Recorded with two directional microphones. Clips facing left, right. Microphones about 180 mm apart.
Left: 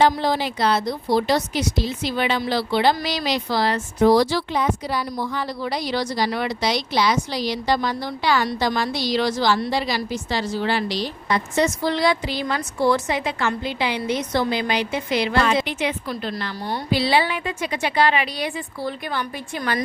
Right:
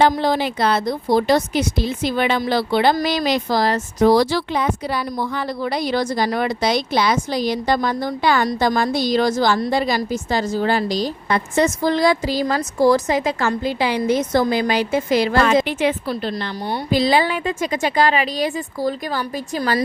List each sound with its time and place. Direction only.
0.0 s a woman's voice: 55° right (ahead or behind)
4.0 s a woman's voice: 60° right (ahead or behind)
16.0 s a woman's voice: 30° right (ahead or behind)
16.9 s a woman's voice: 45° right (ahead or behind)